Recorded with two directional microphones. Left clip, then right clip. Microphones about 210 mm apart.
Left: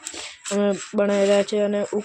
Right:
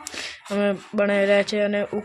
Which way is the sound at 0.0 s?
20° left (ahead or behind).